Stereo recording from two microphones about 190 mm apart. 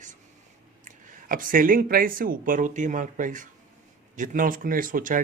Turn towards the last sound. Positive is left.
turn(degrees=-45)  # may be behind; listen again after turning